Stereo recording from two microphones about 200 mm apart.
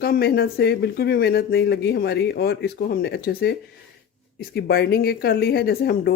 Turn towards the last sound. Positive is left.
turn(degrees=50)  # may be behind; listen again after turning